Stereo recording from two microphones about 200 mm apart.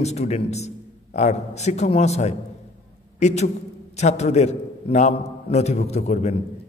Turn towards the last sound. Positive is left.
turn(degrees=35)  # may be behind; listen again after turning